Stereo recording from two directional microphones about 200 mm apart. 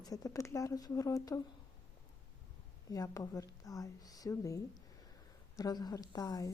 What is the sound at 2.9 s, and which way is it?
A woman's voice, 15° left (ahead or behind).